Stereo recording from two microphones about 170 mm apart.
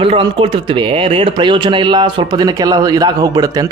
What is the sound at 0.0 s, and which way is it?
Speech, 30° right (ahead or behind).